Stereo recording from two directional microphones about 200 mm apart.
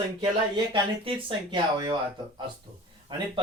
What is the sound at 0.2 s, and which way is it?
Speech, 25° right (ahead or behind).